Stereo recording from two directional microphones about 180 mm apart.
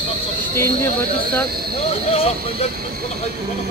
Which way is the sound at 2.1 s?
35° left (ahead or behind).